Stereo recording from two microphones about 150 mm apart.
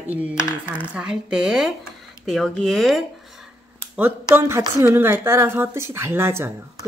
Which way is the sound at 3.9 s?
10° right (ahead or behind).